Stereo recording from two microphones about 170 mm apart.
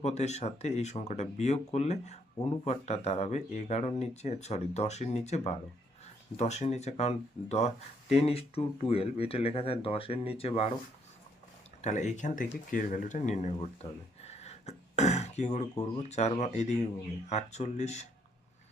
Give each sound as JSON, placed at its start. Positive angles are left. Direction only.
{"t": 0.0, "sound": "speech", "side_deg": 40}
{"t": 11.8, "sound": "speech", "side_deg": 45}
{"t": 14.3, "sound": "throat clearing", "side_deg": 40}
{"t": 15.8, "sound": "speech", "side_deg": 40}